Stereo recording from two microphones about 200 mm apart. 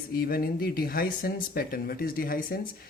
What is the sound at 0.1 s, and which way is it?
Speech, 50° left (ahead or behind).